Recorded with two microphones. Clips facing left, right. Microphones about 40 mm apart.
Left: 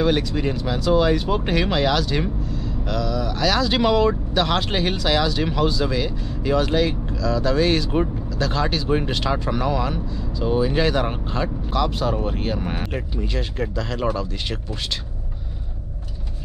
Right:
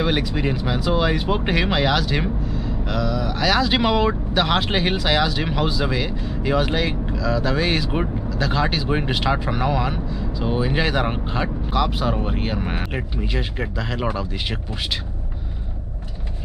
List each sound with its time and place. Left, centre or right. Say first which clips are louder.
0.0 s speech: left 1 dB; centre